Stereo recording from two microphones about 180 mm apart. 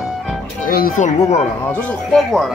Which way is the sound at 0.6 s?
50° left (ahead or behind).